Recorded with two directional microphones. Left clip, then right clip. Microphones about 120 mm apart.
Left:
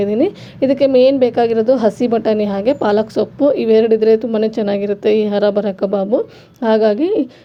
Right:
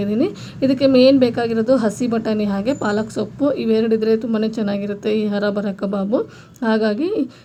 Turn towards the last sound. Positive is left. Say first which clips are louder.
# left 6 dB
turn(degrees=35)  # may be behind; listen again after turning